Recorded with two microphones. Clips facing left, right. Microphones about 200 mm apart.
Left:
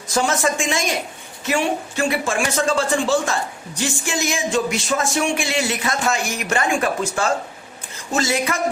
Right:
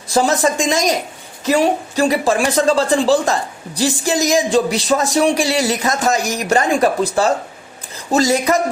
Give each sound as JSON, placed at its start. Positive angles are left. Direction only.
{"t": 0.1, "sound": "a woman's voice", "side_deg": -35}